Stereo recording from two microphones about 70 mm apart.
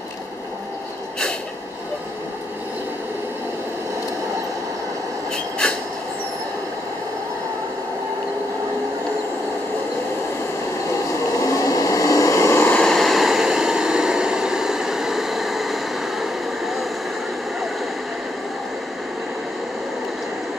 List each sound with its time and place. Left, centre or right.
5.3 s vehicle: centre
11.4 s vehicle: left
12.8 s a sound: centre